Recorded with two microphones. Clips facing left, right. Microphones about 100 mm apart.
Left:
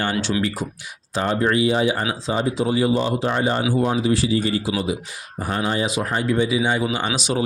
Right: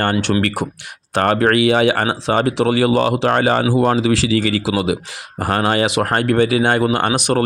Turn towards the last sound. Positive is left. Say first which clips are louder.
# right 6 dB
turn(degrees=-60)  # may be behind; listen again after turning